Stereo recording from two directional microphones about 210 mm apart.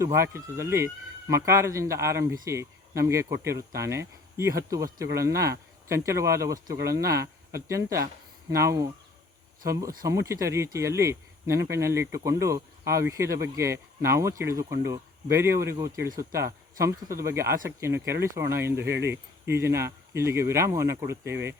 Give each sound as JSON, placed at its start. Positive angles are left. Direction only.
{"t": 0.0, "sound": "speech", "side_deg": -15}
{"t": 18.8, "sound": "speech", "side_deg": -50}
{"t": 19.1, "sound": "speech", "side_deg": -10}